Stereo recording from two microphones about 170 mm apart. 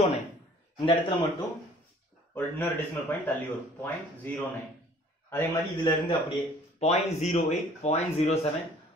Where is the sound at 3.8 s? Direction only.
10° left (ahead or behind).